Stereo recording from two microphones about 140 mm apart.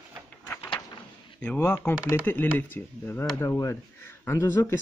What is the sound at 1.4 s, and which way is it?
Speech, 15° left (ahead or behind).